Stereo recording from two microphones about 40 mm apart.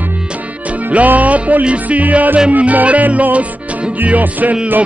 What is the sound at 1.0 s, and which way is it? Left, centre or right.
Music, right.